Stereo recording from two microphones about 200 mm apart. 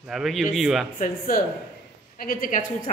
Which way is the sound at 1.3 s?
45° left (ahead or behind).